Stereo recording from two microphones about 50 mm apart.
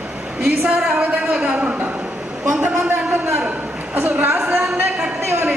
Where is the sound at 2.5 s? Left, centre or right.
Right.